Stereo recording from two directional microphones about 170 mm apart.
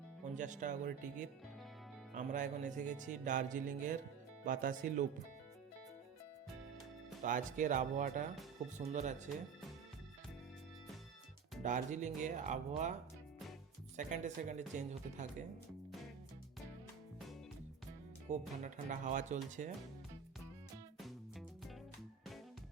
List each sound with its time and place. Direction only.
0.3 s music: 45° right (ahead or behind)
7.2 s music: 50° right (ahead or behind)
11.6 s music: 45° right (ahead or behind)
18.3 s music: 45° right (ahead or behind)
21.0 s music: centre (ahead or behind)